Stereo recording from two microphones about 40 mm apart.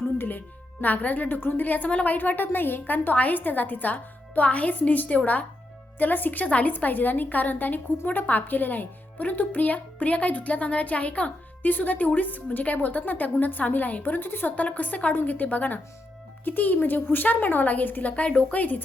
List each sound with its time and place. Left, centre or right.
0.2 s a woman's voice: left
2.0 s a woman's voice: left
6.4 s a woman's voice: left
14.5 s a woman's voice: left
18.2 s speech: left